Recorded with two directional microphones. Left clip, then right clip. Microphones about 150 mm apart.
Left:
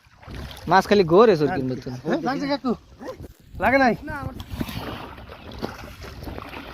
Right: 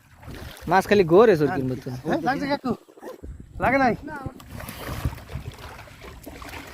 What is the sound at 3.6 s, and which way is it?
Speech, 20° left (ahead or behind).